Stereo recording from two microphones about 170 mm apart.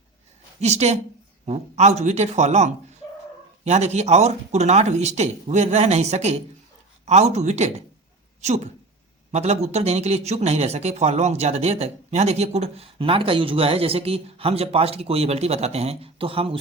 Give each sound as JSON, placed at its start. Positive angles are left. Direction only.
{"t": 0.6, "sound": "speech", "side_deg": -40}